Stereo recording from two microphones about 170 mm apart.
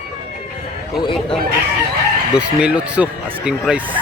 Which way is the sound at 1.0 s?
30° left (ahead or behind).